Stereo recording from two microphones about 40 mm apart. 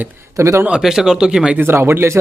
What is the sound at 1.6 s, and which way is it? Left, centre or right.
Speech, right.